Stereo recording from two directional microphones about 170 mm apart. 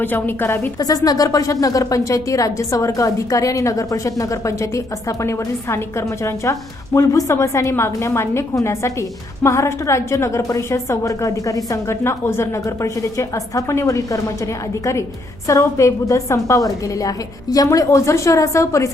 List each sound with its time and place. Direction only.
0.0 s a woman's voice: 10° left (ahead or behind)